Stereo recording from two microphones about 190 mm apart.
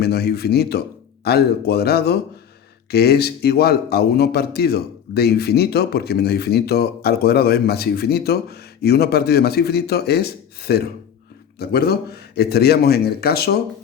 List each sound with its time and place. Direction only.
0.0 s a man's voice: 55° left (ahead or behind)